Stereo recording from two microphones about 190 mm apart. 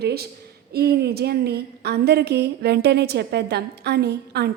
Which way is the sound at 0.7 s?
55° right (ahead or behind).